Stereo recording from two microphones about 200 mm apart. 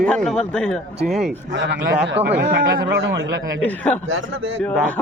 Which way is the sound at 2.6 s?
45° right (ahead or behind).